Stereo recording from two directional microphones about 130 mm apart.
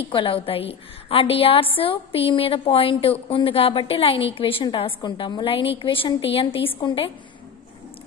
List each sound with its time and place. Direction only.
0.1 s a woman's voice: 40° left (ahead or behind)